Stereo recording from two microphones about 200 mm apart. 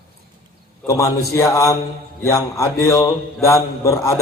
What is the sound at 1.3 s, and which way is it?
Mantra, 15° left (ahead or behind).